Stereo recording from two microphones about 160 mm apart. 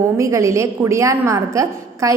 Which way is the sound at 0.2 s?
20° right (ahead or behind).